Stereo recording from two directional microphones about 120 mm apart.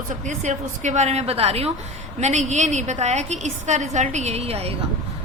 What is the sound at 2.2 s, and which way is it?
A woman's voice, 75° right (ahead or behind).